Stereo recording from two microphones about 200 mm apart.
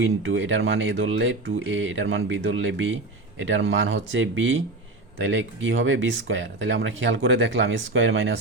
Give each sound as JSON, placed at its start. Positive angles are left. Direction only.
{"t": 0.0, "sound": "speech", "side_deg": -70}